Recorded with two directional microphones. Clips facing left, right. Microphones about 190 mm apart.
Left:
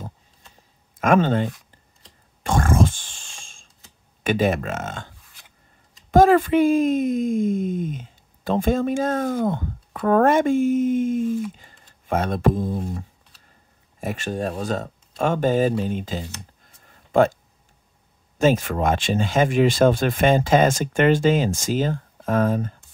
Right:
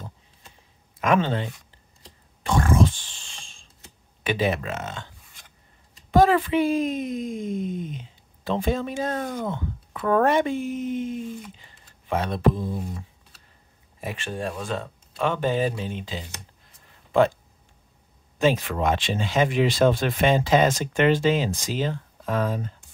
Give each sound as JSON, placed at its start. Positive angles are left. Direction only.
{"t": 0.9, "sound": "speech", "side_deg": 45}
{"t": 2.4, "sound": "a sound", "side_deg": 45}
{"t": 4.2, "sound": "speech", "side_deg": 45}
{"t": 6.1, "sound": "speech", "side_deg": 45}
{"t": 14.0, "sound": "speech", "side_deg": 40}
{"t": 18.4, "sound": "speech", "side_deg": 45}